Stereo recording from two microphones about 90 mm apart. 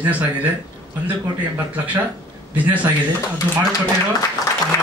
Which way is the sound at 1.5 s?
15° right (ahead or behind).